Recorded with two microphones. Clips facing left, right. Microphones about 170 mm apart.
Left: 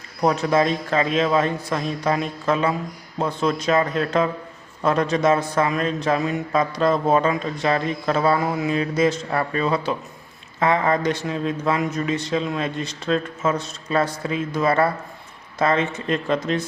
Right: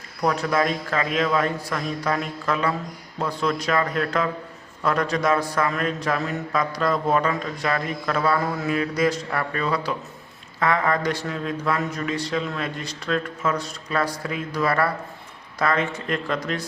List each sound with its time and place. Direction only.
0.2 s a man's voice: 25° left (ahead or behind)